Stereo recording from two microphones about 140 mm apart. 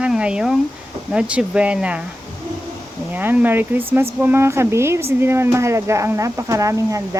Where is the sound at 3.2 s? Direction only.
15° right (ahead or behind).